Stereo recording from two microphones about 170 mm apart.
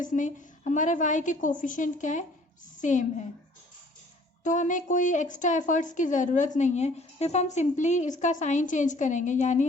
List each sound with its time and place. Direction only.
0.0 s a woman's voice: 45° left (ahead or behind)
4.4 s a woman's voice: 45° left (ahead or behind)